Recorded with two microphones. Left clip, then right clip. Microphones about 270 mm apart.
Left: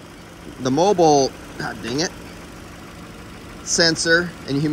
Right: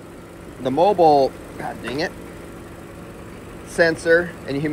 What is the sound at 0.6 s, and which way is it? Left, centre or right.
Speech, centre.